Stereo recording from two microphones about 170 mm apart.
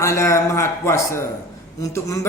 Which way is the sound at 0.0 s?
15° left (ahead or behind).